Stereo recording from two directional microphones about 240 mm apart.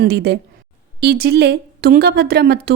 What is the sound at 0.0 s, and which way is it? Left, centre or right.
A woman's voice, right.